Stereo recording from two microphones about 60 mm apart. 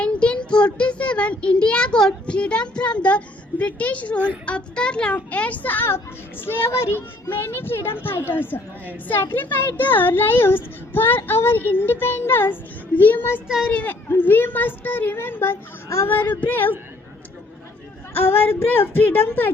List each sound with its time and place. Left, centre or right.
0.0 s a child's voice: centre; by 12.5 s left
13.0 s a child's voice: left
14.1 s speech: left
18.1 s speech: left